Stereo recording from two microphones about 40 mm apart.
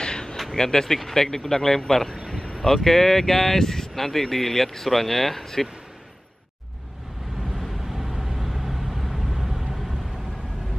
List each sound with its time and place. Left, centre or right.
0.0 s a sound: centre
0.6 s speech: centre
7.5 s vehicle: centre